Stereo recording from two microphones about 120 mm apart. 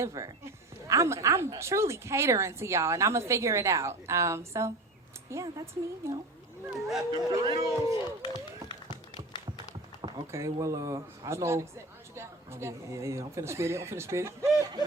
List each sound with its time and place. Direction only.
0.0 s a woman's voice: 25° right (ahead or behind)
6.7 s speech: centre (ahead or behind)
7.1 s speech: 30° right (ahead or behind)
8.2 s speech: 40° left (ahead or behind)
8.7 s tap: 40° left (ahead or behind)
10.3 s speech: 25° right (ahead or behind)